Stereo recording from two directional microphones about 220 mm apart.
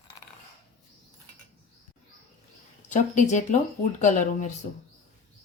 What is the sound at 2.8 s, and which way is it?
Speech, 35° left (ahead or behind).